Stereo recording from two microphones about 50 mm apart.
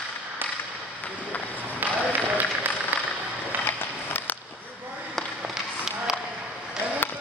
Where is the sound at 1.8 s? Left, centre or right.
Right.